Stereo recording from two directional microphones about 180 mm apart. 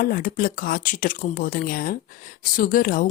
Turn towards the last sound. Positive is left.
turn(degrees=50)  # may be behind; listen again after turning